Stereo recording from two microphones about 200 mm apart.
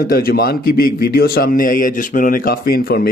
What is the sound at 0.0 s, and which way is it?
A man's voice, 50° left (ahead or behind).